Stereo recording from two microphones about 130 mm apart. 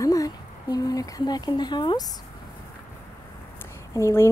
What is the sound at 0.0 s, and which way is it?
Speech, 25° left (ahead or behind).